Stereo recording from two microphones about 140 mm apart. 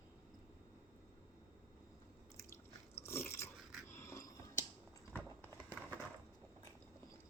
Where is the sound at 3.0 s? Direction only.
20° left (ahead or behind).